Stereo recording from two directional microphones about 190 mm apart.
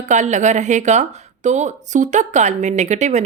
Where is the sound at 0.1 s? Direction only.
40° right (ahead or behind).